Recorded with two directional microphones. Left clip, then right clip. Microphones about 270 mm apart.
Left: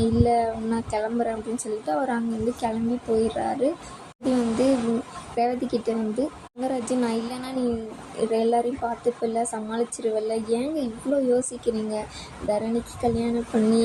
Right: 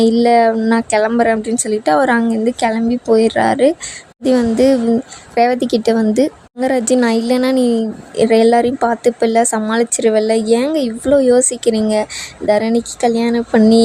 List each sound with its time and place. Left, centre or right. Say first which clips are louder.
0.0 s speech: right 11 dB; right